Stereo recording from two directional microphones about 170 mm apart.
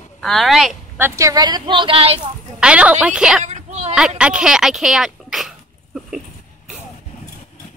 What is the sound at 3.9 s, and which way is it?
A child's voice, 5° right (ahead or behind).